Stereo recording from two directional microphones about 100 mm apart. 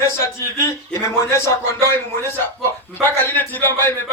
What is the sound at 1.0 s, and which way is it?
Speech, 30° left (ahead or behind).